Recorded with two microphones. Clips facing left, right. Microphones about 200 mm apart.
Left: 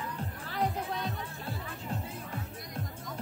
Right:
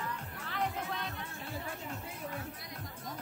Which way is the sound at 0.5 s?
35° left (ahead or behind).